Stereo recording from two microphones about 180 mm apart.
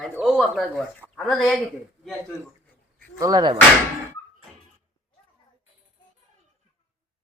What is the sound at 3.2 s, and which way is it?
Speech, 20° right (ahead or behind).